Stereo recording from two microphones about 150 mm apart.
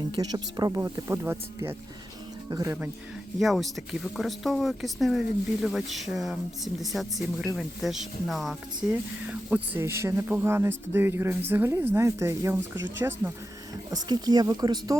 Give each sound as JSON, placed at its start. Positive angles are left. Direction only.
{"t": 0.1, "sound": "speech", "side_deg": -30}
{"t": 3.3, "sound": "speech", "side_deg": 0}
{"t": 13.9, "sound": "speech", "side_deg": -25}